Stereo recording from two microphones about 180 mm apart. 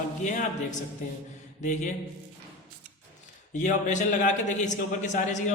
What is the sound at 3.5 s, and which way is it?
A man's voice, 40° left (ahead or behind).